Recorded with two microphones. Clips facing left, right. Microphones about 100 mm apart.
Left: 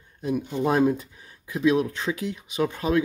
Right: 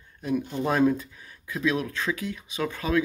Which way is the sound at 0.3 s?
15° left (ahead or behind).